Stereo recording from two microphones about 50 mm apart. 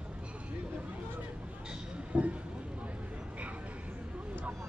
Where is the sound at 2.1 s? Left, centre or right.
Right.